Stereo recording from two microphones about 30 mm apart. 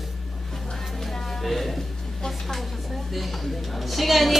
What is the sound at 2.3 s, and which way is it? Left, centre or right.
Speech, centre.